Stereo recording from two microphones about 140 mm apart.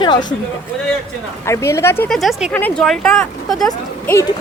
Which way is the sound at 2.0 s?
Centre (ahead or behind).